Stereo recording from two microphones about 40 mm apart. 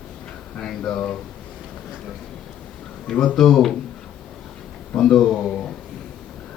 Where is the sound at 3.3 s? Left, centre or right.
Centre.